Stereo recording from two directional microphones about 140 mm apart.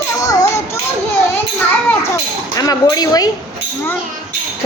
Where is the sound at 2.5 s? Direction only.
25° left (ahead or behind).